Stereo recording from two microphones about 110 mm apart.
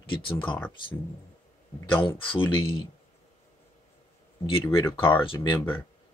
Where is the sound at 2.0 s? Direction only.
50° left (ahead or behind).